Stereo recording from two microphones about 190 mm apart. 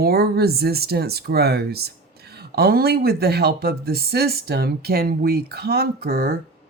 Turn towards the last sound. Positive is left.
turn(degrees=-55)  # may be behind; listen again after turning